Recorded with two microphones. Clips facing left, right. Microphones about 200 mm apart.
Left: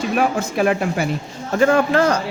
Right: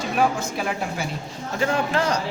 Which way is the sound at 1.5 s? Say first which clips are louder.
Left 8 dB; 50° left (ahead or behind).